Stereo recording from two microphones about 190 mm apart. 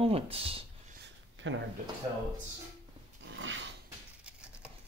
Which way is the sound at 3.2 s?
80° right.